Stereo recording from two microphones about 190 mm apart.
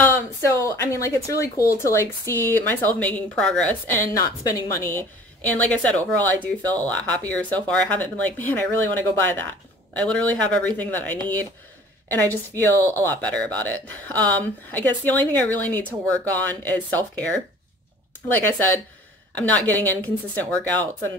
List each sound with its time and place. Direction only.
0.0 s speech: 10° left (ahead or behind)
18.4 s speech: 10° left (ahead or behind)